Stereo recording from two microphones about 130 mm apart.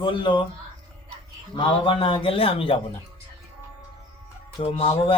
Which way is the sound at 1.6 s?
40° left (ahead or behind).